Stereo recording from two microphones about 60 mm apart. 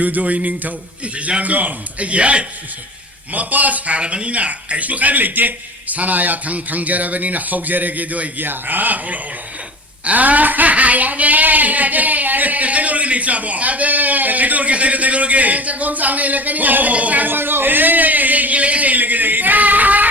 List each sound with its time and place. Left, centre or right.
0.0 s speech: right